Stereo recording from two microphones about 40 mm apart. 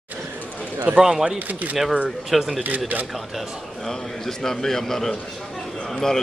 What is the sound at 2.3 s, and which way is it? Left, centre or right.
Speech, centre.